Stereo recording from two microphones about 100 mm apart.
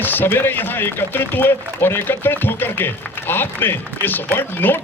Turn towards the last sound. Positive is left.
turn(degrees=20)  # may be behind; listen again after turning